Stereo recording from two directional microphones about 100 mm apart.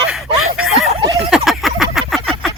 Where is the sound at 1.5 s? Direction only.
5° right (ahead or behind).